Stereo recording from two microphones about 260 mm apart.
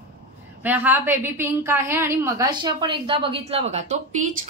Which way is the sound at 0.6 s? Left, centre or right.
Centre.